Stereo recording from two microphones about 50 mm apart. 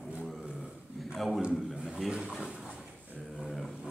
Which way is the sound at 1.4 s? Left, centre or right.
Centre.